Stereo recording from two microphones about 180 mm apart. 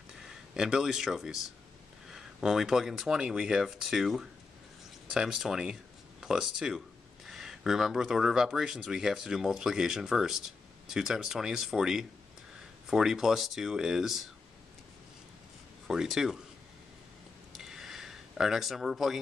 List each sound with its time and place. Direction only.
0.2 s speech: 5° right (ahead or behind)
15.9 s speech: 5° right (ahead or behind)
17.6 s a sound: centre (ahead or behind)